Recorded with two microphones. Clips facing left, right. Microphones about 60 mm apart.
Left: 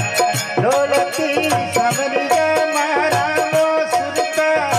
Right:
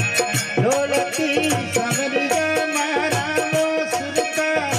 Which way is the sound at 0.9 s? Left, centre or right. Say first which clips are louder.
Left 3 dB; left.